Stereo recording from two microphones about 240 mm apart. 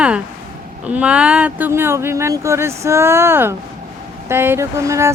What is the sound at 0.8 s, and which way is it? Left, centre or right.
Child singing, centre.